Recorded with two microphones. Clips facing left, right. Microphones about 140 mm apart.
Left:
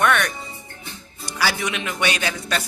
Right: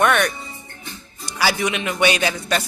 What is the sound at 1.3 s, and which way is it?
A man's voice, 10° right (ahead or behind).